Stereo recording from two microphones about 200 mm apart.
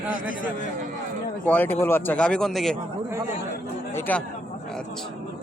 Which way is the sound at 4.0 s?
10° left (ahead or behind).